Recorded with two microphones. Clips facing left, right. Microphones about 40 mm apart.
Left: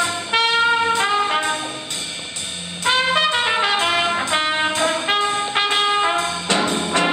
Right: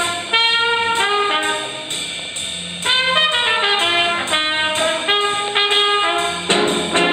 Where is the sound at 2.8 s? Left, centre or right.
Right.